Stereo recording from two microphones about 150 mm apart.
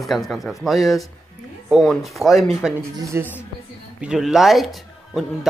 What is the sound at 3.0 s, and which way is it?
Speech, 20° right (ahead or behind).